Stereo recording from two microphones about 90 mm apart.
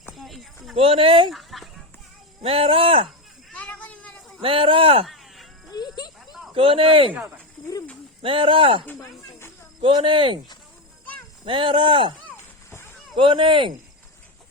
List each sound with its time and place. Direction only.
0.1 s a sound: centre (ahead or behind)
0.8 s speech: 90° right
1.3 s chicken: centre (ahead or behind)
2.4 s speech: 90° right
3.5 s a sound: 15° left (ahead or behind)
4.4 s speech: 90° right
5.0 s a sound: centre (ahead or behind)
5.7 s music: 50° left (ahead or behind)
6.5 s speech: 90° right
8.2 s speech: 90° right
9.8 s speech: 80° right
11.4 s speech: 70° right (ahead or behind)
12.7 s a sound: 25° left (ahead or behind)
13.1 s speech: 75° right (ahead or behind)